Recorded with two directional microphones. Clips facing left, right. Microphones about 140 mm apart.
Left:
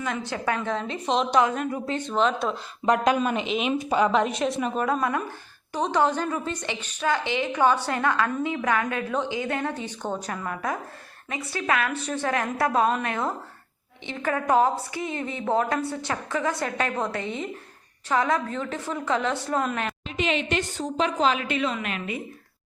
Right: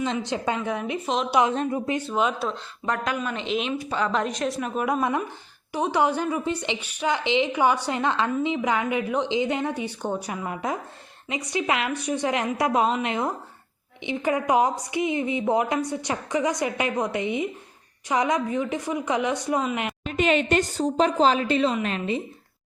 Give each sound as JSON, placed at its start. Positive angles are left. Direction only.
{"t": 0.0, "sound": "a woman's voice", "side_deg": -20}
{"t": 1.0, "sound": "a woman's voice", "side_deg": 0}
{"t": 1.4, "sound": "a woman's voice", "side_deg": -25}
{"t": 2.0, "sound": "a woman's voice", "side_deg": -10}
{"t": 2.8, "sound": "speech", "side_deg": 20}
{"t": 3.4, "sound": "a woman's voice", "side_deg": 5}
{"t": 3.7, "sound": "speech", "side_deg": 15}
{"t": 4.1, "sound": "a woman's voice", "side_deg": 5}
{"t": 4.9, "sound": "a woman's voice", "side_deg": -15}
{"t": 20.1, "sound": "a woman's voice", "side_deg": -50}